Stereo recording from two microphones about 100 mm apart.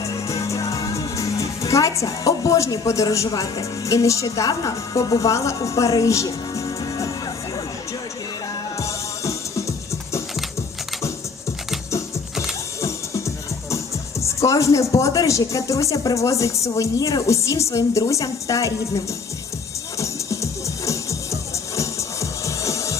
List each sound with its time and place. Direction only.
0.0 s speech: 35° left (ahead or behind)
8.8 s music: 30° left (ahead or behind)
12.3 s mechanisms: 5° right (ahead or behind)
12.8 s speech: 30° left (ahead or behind)
20.0 s music: 30° left (ahead or behind)